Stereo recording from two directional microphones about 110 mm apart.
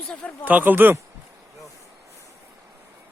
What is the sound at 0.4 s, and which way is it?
Speech, 15° right (ahead or behind).